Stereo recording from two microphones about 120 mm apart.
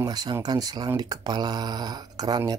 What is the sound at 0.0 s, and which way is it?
Speech, 35° right (ahead or behind).